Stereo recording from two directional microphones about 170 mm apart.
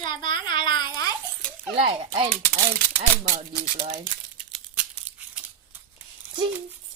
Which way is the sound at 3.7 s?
45° right (ahead or behind).